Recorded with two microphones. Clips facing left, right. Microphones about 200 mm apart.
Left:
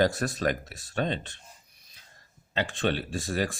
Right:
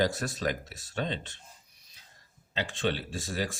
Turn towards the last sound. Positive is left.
turn(degrees=55)  # may be behind; listen again after turning